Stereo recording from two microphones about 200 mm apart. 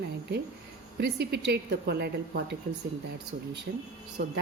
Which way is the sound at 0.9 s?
55° right (ahead or behind).